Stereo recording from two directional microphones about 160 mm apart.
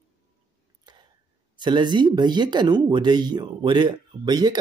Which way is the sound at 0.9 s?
25° right (ahead or behind).